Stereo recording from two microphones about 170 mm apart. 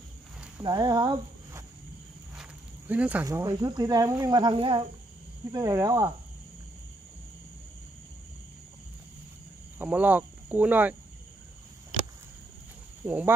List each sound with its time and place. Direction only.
0.7 s speech: 25° right (ahead or behind)
2.9 s speech: 10° right (ahead or behind)
3.3 s speech: 20° right (ahead or behind)
5.5 s speech: 20° right (ahead or behind)
9.8 s speech: 10° right (ahead or behind)
13.0 s speech: 10° right (ahead or behind)